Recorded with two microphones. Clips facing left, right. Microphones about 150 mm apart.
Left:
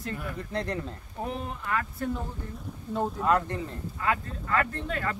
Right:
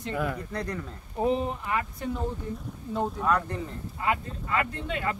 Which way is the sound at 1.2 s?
15° right (ahead or behind).